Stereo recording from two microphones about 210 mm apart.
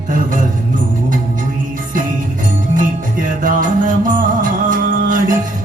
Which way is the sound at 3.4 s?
40° right (ahead or behind).